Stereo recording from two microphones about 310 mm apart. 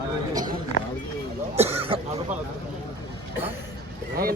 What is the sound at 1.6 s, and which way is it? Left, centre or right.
Speech, centre.